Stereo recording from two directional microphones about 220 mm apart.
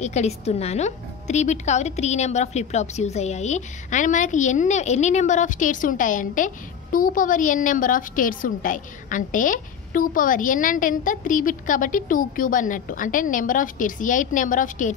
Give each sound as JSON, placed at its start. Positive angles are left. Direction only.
{"t": 0.0, "sound": "a woman's voice", "side_deg": 30}